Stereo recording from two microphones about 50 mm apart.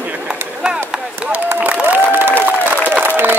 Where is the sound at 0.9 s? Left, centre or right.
Right.